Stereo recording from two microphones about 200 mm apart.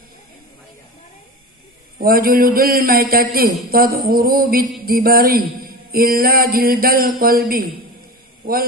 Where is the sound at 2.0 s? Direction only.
45° right (ahead or behind).